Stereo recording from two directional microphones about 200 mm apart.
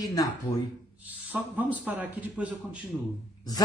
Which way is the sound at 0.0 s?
20° left (ahead or behind).